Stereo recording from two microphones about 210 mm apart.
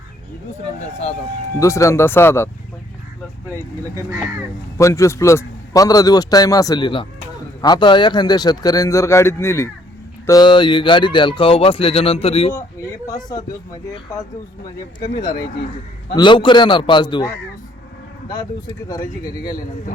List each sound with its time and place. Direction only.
1.5 s a man's voice: 15° left (ahead or behind)
3.9 s speech: 15° right (ahead or behind)
4.8 s a man's voice: 15° left (ahead or behind)
13.9 s a man's voice: 15° left (ahead or behind)
16.0 s speech: 20° left (ahead or behind)